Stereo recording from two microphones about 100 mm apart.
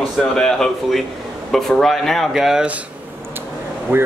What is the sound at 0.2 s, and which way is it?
Speech, 5° left (ahead or behind).